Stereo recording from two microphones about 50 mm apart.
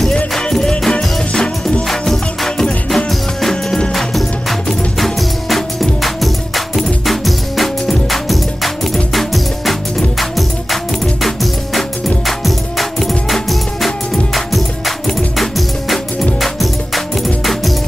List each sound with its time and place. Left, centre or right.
0.5 s music: centre
1.9 s music: centre
12.3 s music: centre